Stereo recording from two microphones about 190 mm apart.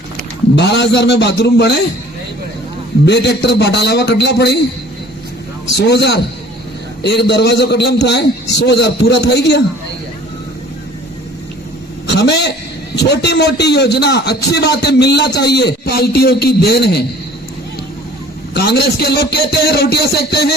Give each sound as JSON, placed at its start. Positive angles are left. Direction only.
{"t": 0.5, "sound": "a man's voice", "side_deg": 65}
{"t": 3.1, "sound": "a man's voice", "side_deg": 65}
{"t": 5.7, "sound": "a man's voice", "side_deg": 60}
{"t": 12.0, "sound": "a man's voice", "side_deg": 65}
{"t": 18.5, "sound": "a man's voice", "side_deg": 60}